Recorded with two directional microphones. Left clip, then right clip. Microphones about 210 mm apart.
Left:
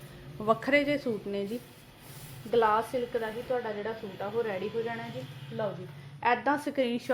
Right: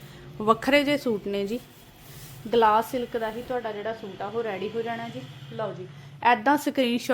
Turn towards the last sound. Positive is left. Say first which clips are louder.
# right 5 dB
turn(degrees=-50)  # may be behind; listen again after turning